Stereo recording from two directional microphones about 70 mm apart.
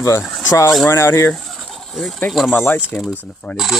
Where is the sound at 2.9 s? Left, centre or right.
Left.